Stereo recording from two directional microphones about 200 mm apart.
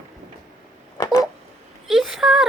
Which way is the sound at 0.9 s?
15° left (ahead or behind).